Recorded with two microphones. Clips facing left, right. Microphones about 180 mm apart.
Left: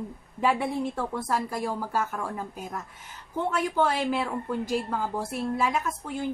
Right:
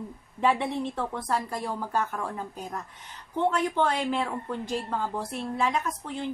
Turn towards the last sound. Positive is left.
turn(degrees=10)  # may be behind; listen again after turning